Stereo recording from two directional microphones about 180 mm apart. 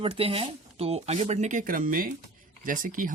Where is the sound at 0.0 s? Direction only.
30° right (ahead or behind).